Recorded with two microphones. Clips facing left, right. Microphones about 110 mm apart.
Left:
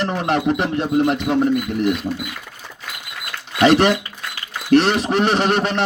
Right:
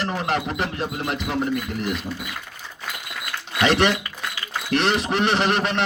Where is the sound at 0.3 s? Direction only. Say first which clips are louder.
Left 6 dB; 35° left (ahead or behind).